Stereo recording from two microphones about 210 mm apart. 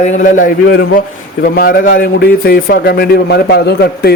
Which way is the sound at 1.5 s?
45° left (ahead or behind).